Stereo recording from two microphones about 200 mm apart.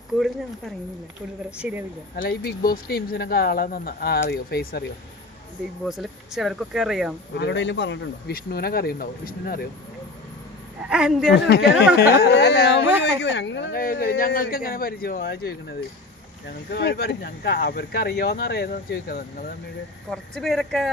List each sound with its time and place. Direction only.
1.5 s speech: 5° right (ahead or behind)
2.1 s speech: 50° left (ahead or behind)
5.8 s speech: centre (ahead or behind)
7.3 s speech: 60° left (ahead or behind)
10.8 s speech: 5° right (ahead or behind)
11.3 s speech: 55° left (ahead or behind)
16.7 s speech: 55° left (ahead or behind)
20.1 s speech: centre (ahead or behind)